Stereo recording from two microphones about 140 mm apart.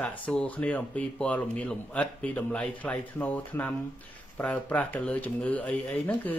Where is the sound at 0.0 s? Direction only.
10° left (ahead or behind).